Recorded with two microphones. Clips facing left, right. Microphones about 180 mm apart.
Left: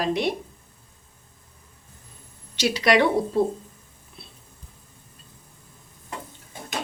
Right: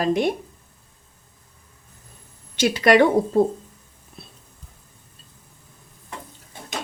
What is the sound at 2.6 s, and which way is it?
Speech, 50° right (ahead or behind).